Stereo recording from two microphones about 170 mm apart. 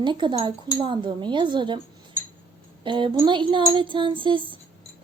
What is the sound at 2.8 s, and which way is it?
A woman's voice, 30° right (ahead or behind).